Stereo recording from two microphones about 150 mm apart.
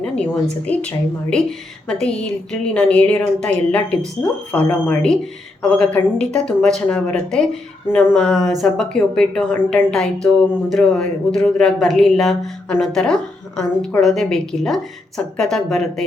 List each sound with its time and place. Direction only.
0.6 s a woman's voice: 10° left (ahead or behind)